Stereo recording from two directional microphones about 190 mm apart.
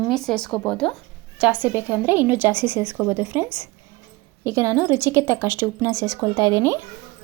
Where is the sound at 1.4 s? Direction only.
10° right (ahead or behind).